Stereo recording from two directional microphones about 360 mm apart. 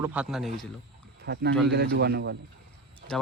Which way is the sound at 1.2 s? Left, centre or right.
Right.